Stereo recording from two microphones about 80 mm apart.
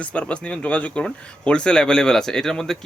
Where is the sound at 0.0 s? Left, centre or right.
Centre.